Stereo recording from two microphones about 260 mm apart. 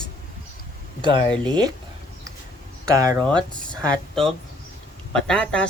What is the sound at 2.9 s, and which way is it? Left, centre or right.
Speech, centre.